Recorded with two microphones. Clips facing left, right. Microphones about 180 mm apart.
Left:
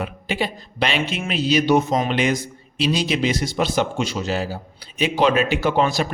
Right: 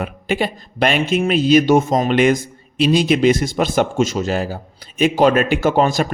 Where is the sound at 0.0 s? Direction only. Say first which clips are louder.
Right 4 dB; 50° right (ahead or behind).